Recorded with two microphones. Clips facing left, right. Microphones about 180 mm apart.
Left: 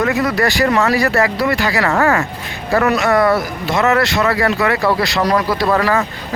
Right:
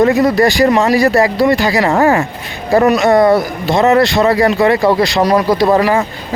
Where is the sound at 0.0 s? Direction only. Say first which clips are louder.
Right 6 dB; 30° right (ahead or behind).